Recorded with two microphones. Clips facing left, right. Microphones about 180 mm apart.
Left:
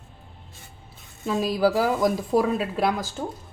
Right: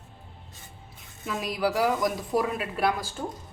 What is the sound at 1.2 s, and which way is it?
A woman's voice, 30° left (ahead or behind).